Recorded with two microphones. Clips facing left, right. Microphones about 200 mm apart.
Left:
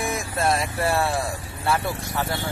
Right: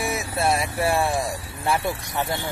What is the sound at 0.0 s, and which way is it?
Speech, 5° right (ahead or behind).